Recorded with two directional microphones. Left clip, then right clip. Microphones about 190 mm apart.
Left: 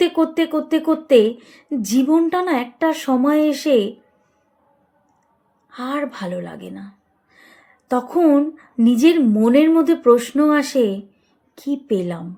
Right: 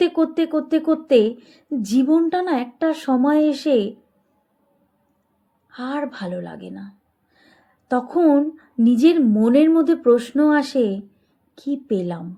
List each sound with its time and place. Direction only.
0.0 s a woman's voice: 20° left (ahead or behind)
5.7 s a woman's voice: 20° left (ahead or behind)
7.9 s a woman's voice: 20° left (ahead or behind)